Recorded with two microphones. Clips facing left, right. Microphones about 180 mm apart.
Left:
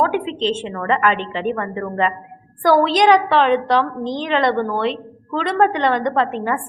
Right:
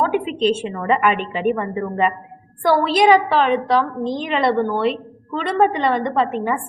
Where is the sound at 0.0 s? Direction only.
5° right (ahead or behind).